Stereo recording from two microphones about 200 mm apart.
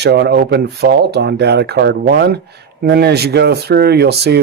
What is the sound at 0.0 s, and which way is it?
Speech, 55° right (ahead or behind).